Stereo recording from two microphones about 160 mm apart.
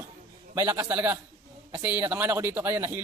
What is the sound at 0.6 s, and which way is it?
Speech, 15° right (ahead or behind).